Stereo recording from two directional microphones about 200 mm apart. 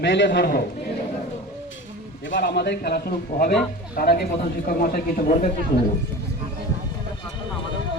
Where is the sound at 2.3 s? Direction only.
60° left (ahead or behind); by 5.4 s 40° left (ahead or behind).